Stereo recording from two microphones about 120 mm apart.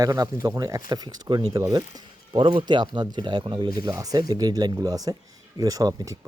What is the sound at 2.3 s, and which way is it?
A man's voice, 45° right (ahead or behind).